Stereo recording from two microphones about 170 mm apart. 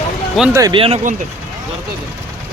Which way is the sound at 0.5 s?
20° right (ahead or behind).